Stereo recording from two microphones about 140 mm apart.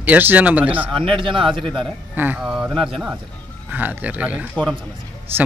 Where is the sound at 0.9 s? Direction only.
40° right (ahead or behind).